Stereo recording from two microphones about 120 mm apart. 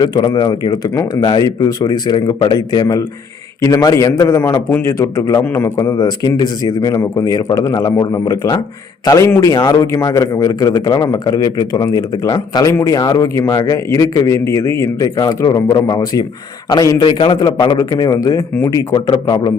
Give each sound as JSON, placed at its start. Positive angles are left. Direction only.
{"t": 0.0, "sound": "a man's voice", "side_deg": 35}
{"t": 17.7, "sound": "a man's voice", "side_deg": 30}